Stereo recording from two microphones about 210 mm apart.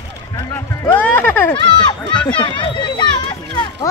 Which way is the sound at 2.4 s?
20° left (ahead or behind).